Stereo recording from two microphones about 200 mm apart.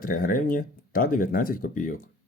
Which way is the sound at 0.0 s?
45° left (ahead or behind).